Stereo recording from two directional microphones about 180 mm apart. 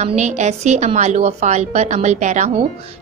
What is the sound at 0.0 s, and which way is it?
A woman's voice, 40° right (ahead or behind).